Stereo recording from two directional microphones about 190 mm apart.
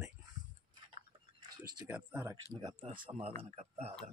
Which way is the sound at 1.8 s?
10° right (ahead or behind).